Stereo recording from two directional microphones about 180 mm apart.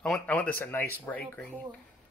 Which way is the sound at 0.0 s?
5° left (ahead or behind).